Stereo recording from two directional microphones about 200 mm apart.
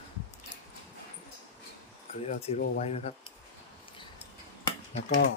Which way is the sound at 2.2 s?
30° left (ahead or behind).